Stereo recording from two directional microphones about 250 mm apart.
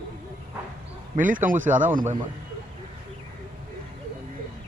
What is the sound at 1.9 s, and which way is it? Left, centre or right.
Speech, right.